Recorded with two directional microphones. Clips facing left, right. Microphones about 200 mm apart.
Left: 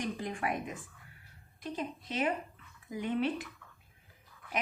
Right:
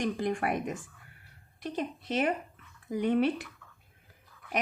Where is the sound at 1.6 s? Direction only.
65° right (ahead or behind).